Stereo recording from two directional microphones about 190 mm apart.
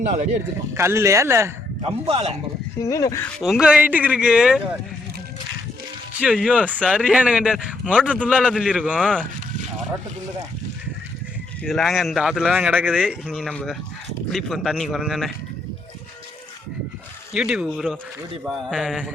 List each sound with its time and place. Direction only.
0.7 s speech: 15° right (ahead or behind)
1.8 s a man's voice: 30° right (ahead or behind)
2.8 s speech: 20° left (ahead or behind)
3.4 s a man's voice: 5° right (ahead or behind)
6.1 s a man's voice: 5° right (ahead or behind)
9.0 s a man's voice: 5° left (ahead or behind)
11.6 s a man's voice: centre (ahead or behind)
17.3 s a man's voice: 5° right (ahead or behind)